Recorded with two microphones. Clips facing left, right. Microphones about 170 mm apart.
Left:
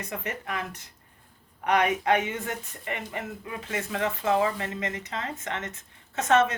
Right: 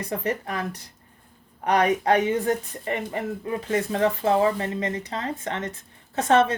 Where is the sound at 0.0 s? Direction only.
35° right (ahead or behind).